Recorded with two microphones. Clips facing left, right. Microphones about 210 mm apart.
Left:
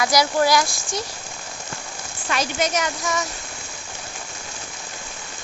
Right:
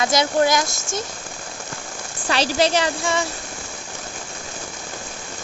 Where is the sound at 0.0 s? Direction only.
25° right (ahead or behind).